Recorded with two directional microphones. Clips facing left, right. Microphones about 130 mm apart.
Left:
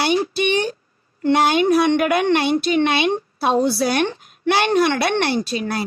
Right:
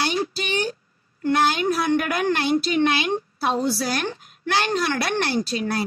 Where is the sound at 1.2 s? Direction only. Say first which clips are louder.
Left 4 dB; 25° left (ahead or behind).